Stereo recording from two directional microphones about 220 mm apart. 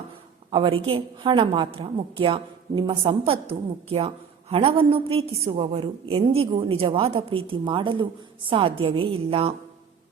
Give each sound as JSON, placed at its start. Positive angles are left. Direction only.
{"t": 0.5, "sound": "a woman's voice", "side_deg": -25}